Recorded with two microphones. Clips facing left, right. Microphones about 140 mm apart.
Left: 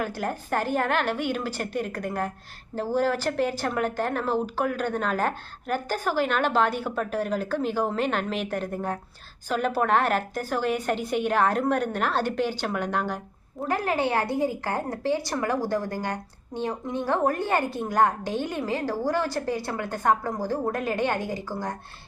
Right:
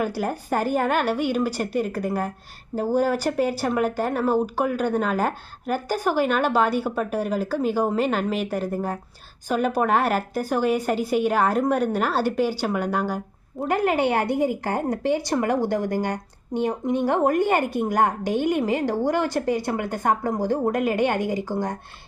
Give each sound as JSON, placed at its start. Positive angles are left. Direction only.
{"t": 0.0, "sound": "speech", "side_deg": -10}
{"t": 13.6, "sound": "speech", "side_deg": -20}